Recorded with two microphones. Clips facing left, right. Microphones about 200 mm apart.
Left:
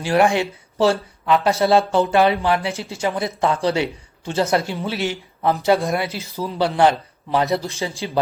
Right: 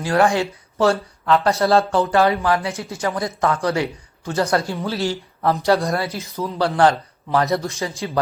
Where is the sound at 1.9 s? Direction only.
25° left (ahead or behind).